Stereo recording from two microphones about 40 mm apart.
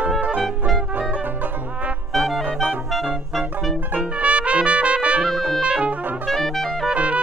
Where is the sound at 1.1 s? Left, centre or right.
Right.